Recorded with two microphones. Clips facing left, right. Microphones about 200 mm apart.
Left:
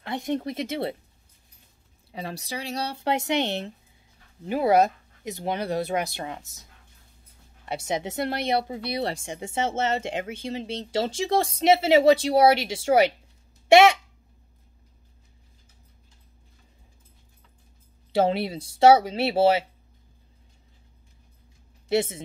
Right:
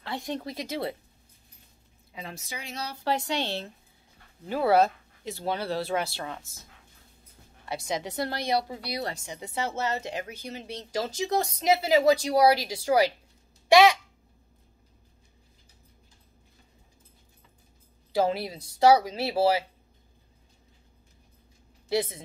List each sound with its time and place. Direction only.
0.0 s speech: 20° left (ahead or behind)
2.1 s speech: 35° left (ahead or behind); by 6.4 s 20° left (ahead or behind)
7.6 s speech: 25° left (ahead or behind)
13.7 s a sound: 25° left (ahead or behind)
18.1 s speech: 25° left (ahead or behind)
21.8 s a woman's voice: 25° left (ahead or behind)